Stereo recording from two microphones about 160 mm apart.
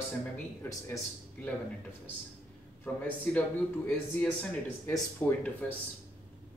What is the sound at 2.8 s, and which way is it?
Speech, 10° left (ahead or behind).